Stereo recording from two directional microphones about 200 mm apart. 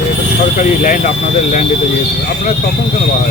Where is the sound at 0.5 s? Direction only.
40° left (ahead or behind).